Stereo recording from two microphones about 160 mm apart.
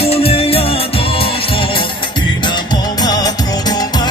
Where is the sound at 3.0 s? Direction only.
25° left (ahead or behind).